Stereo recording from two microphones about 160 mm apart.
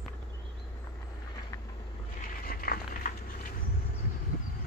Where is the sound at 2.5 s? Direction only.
65° left (ahead or behind).